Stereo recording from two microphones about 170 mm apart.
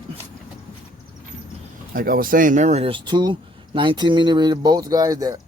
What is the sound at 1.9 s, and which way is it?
Speech, 60° right (ahead or behind).